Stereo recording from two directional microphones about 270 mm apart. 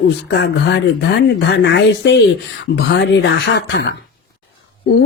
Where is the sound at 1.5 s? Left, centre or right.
Left.